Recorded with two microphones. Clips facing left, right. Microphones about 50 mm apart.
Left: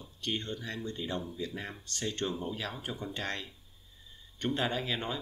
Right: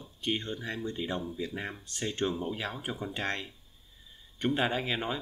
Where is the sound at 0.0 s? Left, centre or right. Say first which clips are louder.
Right 3 dB; centre.